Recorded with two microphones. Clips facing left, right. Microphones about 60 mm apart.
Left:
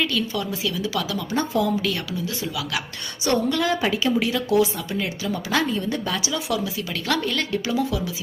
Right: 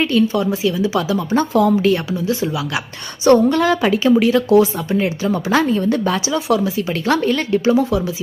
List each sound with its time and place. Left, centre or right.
0.0 s a woman's voice: right
1.4 s speech: right
1.8 s a woman's voice: right
3.3 s a woman's voice: right